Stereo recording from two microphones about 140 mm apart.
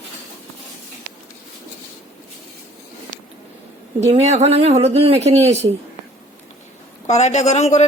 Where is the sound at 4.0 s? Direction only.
50° right (ahead or behind).